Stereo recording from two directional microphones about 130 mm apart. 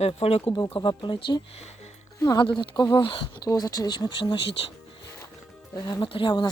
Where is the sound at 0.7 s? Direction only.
35° left (ahead or behind).